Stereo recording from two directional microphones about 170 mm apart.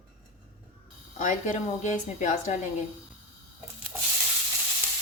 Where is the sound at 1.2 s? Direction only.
45° left (ahead or behind).